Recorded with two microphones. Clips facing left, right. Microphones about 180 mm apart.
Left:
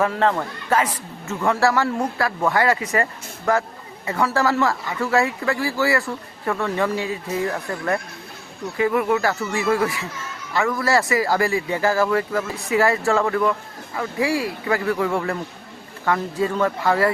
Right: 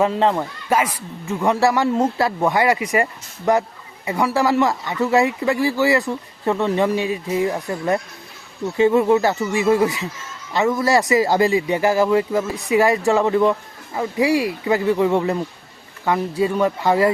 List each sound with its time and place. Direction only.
0.0 s speech: 20° right (ahead or behind)